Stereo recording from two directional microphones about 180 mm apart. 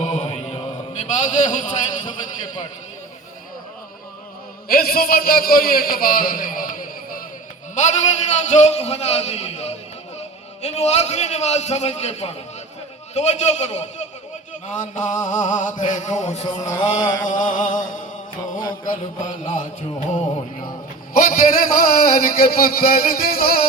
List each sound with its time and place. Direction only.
0.0 s a sound: 40° left (ahead or behind)
4.7 s a man's voice: 55° left (ahead or behind)
7.8 s a man's voice: 40° left (ahead or behind)
14.8 s music: 45° left (ahead or behind)
15.8 s a man's voice: 40° left (ahead or behind)
16.6 s a sound: 20° left (ahead or behind)
17.2 s music: 45° left (ahead or behind)
21.1 s a man's voice: 50° left (ahead or behind)